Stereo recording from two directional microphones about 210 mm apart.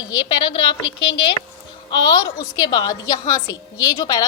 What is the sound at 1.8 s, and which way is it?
A woman's voice, 20° left (ahead or behind).